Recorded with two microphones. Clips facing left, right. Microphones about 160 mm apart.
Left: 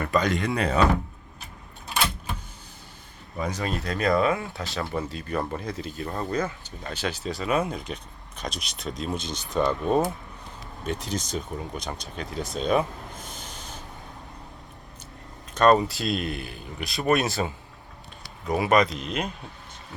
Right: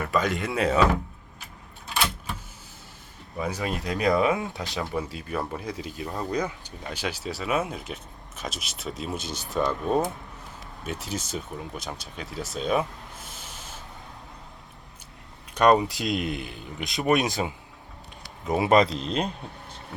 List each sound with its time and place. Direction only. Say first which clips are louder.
0.0 s speech: left 2 dB; 5° right (ahead or behind)
3.3 s speech: even; 5° right (ahead or behind)
13.2 s a sound: left 3 dB; 5° right (ahead or behind)
15.5 s speech: left 1 dB; 15° right (ahead or behind); by 19.3 s 30° right (ahead or behind)